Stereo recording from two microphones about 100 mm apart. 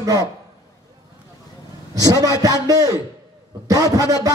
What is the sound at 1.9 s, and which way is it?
A man's voice, 40° right (ahead or behind).